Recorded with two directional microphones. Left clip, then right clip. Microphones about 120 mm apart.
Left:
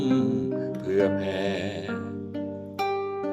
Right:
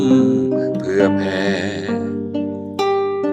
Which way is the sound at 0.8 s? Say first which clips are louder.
Right 5 dB; 25° left (ahead or behind).